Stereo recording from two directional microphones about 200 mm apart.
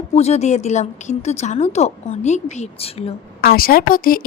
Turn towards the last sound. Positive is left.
turn(degrees=45)  # may be behind; listen again after turning